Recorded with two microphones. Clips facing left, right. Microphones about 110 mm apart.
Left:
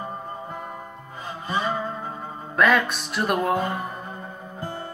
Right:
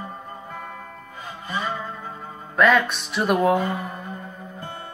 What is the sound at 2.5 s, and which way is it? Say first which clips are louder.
Music: right 2 dB; centre (ahead or behind).